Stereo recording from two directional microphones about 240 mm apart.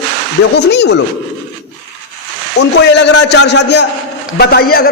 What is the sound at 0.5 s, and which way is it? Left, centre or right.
Speech, left.